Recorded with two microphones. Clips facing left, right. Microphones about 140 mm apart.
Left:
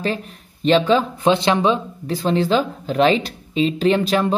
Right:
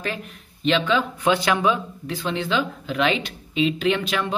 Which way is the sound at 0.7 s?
35° left (ahead or behind).